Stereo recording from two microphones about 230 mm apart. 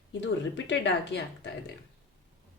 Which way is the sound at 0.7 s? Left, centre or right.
Left.